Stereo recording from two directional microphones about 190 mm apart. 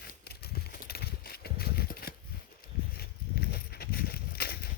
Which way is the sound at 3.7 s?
55° left (ahead or behind).